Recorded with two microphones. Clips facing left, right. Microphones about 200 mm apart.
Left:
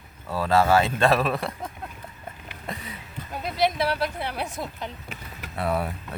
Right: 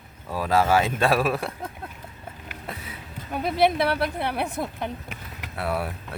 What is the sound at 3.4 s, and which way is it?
A woman's voice, 55° right (ahead or behind).